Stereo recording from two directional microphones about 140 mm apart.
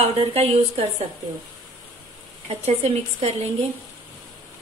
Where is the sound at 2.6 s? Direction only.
45° right (ahead or behind).